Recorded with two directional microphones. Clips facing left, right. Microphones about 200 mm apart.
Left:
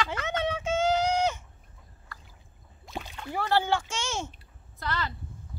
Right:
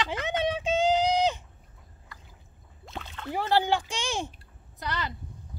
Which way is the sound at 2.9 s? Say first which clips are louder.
Even; 15° left (ahead or behind).